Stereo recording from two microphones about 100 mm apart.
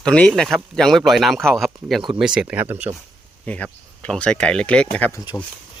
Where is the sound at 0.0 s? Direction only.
10° left (ahead or behind); by 2.9 s 15° right (ahead or behind).